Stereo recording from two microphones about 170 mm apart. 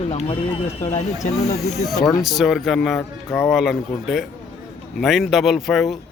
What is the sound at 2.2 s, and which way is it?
Speech, centre (ahead or behind).